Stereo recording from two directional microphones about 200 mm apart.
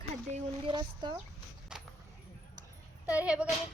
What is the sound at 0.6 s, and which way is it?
Speech, 20° right (ahead or behind).